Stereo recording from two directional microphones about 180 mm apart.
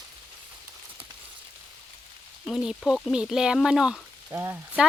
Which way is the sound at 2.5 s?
Centre (ahead or behind).